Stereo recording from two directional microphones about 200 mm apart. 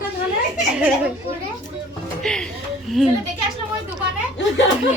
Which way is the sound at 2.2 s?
5° left (ahead or behind).